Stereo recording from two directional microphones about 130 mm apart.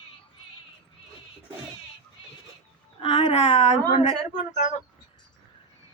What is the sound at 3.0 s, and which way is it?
Speech, 40° left (ahead or behind).